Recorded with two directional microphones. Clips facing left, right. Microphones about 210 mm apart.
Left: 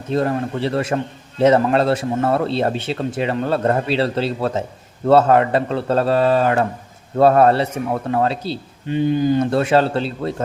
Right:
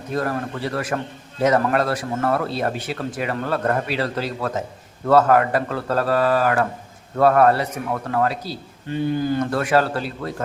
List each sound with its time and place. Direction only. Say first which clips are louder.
0.1 s a man's voice: left 5 dB; 25° left (ahead or behind)